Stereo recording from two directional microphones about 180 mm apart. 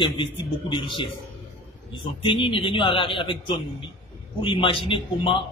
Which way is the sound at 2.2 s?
30° left (ahead or behind).